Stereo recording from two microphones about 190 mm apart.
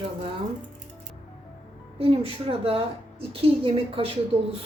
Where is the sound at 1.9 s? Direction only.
30° right (ahead or behind).